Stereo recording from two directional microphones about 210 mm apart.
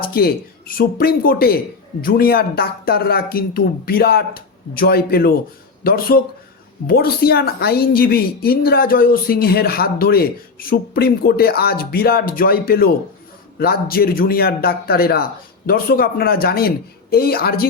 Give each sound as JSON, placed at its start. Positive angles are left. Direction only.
{"t": 0.0, "sound": "a man's voice", "side_deg": 45}